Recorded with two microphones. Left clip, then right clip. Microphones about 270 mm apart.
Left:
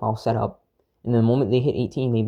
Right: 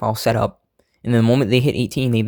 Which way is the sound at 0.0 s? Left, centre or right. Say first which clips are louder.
Right 5 dB; right.